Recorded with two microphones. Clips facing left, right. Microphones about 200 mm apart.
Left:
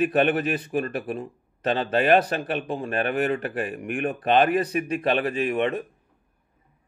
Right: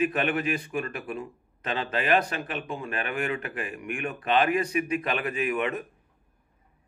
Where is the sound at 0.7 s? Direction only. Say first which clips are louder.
Left 5 dB; 40° left (ahead or behind).